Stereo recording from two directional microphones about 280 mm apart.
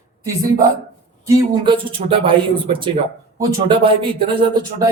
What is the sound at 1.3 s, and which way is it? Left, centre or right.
Speech, centre.